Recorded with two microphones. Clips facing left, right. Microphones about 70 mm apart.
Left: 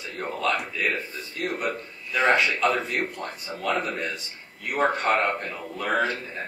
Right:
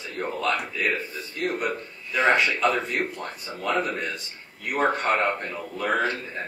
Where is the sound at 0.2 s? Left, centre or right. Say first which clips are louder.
Even; centre.